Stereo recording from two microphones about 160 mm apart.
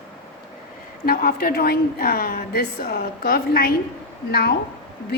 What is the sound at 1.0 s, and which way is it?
A woman's voice, 70° left (ahead or behind).